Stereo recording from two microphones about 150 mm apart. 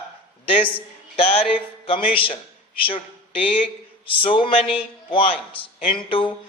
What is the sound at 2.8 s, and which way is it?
A man's voice, 35° left (ahead or behind).